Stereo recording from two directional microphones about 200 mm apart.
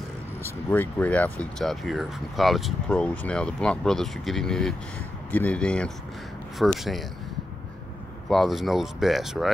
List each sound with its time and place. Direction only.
0.4 s speech: 10° left (ahead or behind)
8.3 s speech: centre (ahead or behind)